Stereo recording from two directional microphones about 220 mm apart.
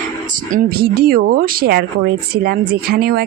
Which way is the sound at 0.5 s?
45° right (ahead or behind).